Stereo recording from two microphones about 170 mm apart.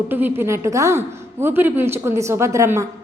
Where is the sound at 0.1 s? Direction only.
10° right (ahead or behind).